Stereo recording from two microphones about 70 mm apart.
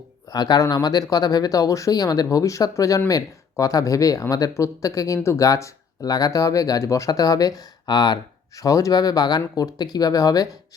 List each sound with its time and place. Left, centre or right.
0.3 s speech: left